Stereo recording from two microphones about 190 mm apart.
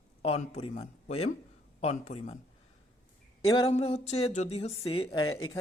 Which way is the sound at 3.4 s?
30° left (ahead or behind).